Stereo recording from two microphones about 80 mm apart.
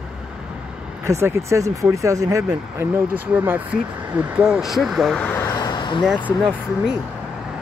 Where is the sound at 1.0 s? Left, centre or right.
Right.